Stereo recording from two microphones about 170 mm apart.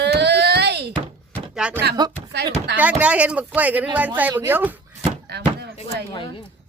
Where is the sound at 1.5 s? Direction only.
5° right (ahead or behind).